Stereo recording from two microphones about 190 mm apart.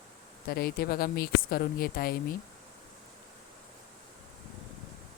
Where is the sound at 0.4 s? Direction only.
55° left (ahead or behind).